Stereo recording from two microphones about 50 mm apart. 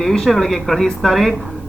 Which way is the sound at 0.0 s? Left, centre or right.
Centre.